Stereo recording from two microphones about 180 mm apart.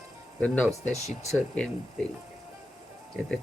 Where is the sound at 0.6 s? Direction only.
15° right (ahead or behind).